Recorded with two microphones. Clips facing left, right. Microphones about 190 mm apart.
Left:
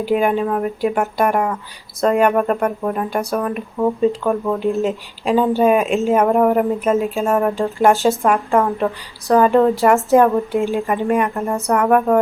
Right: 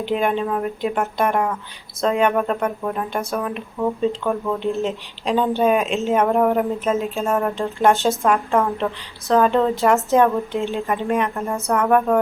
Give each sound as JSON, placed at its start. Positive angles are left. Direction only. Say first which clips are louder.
{"t": 0.0, "sound": "a woman's voice", "louder": "left 4 dB", "side_deg": 5}
{"t": 4.6, "sound": "a woman's voice", "louder": "left 4 dB", "side_deg": 0}
{"t": 9.8, "sound": "a woman's voice", "louder": "left 3 dB", "side_deg": 0}
{"t": 10.2, "sound": "speech", "louder": "left 4 dB", "side_deg": 15}
{"t": 11.0, "sound": "a woman's voice", "louder": "left 3 dB", "side_deg": 0}